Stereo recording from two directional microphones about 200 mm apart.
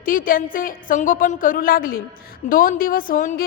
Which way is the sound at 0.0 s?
45° left (ahead or behind).